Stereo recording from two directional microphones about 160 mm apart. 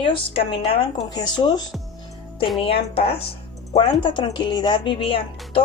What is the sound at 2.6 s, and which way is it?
Speech, 35° left (ahead or behind).